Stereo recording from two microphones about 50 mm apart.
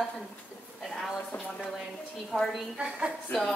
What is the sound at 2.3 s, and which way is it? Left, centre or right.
Speech, centre.